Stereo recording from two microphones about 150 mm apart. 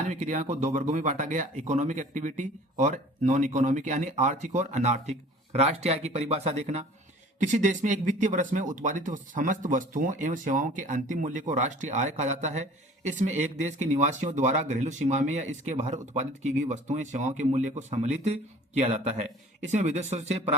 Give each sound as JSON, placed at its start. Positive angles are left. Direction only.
{"t": 0.1, "sound": "speech", "side_deg": -50}